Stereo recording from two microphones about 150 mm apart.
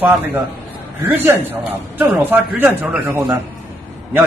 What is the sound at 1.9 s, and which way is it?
A man's voice, 10° right (ahead or behind).